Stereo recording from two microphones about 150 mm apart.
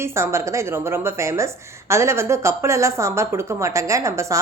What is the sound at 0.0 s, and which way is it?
A woman's voice, 20° right (ahead or behind).